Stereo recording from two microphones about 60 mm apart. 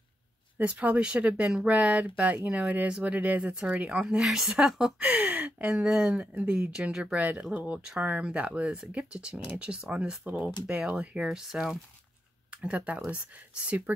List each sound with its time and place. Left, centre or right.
0.6 s speech: right
4.0 s speech: centre
5.0 s speech: right
5.7 s speech: centre
7.2 s speech: right
10.2 s speech: right
11.2 s speech: centre
12.4 s speech: right